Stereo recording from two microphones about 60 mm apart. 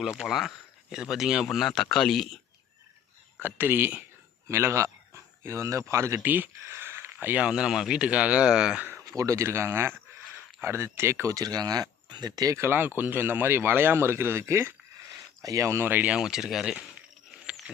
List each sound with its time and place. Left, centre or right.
0.0 s a man's voice: centre
3.4 s speech: right
4.4 s speech: right
6.1 s a sound: right
7.3 s speech: centre
9.0 s speech: right
11.3 s speech: right
12.5 s speech: right
15.4 s speech: right
15.9 s speech: right
16.1 s speech: centre
17.5 s a sound: centre